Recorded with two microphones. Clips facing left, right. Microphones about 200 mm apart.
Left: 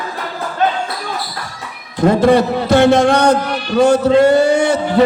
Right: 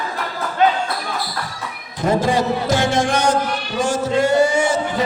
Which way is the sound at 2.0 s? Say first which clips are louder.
Left 6 dB; 60° left (ahead or behind).